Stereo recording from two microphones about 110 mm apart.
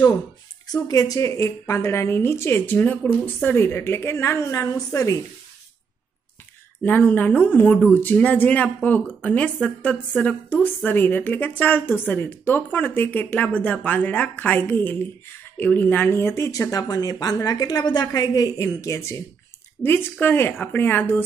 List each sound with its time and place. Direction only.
0.8 s a woman's voice: 35° left (ahead or behind)
6.8 s a woman's voice: 15° left (ahead or behind)